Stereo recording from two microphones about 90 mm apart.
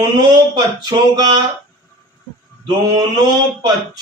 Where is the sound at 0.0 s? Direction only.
50° right (ahead or behind).